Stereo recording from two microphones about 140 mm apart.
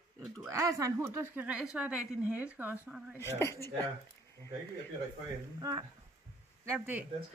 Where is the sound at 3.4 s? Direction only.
20° left (ahead or behind).